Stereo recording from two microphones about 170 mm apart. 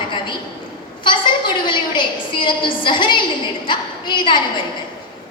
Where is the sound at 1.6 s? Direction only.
30° left (ahead or behind).